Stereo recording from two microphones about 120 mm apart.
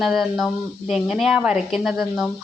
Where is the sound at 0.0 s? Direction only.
Centre (ahead or behind).